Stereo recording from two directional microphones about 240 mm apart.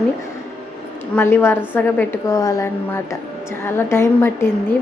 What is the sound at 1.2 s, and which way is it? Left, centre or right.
A woman's voice, centre.